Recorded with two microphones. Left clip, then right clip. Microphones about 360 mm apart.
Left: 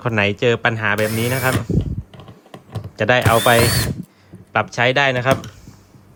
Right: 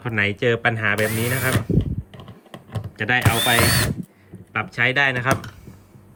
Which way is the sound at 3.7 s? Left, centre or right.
Centre.